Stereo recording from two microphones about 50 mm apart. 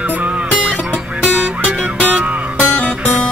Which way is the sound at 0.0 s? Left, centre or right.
Right.